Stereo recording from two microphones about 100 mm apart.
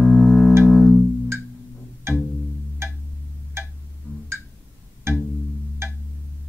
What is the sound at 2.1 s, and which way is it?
Music, 25° right (ahead or behind).